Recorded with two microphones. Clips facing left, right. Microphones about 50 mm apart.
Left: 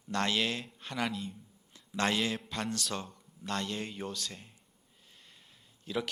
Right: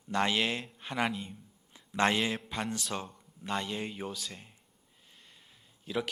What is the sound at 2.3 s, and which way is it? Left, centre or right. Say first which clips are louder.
Speech: right 1 dB; centre.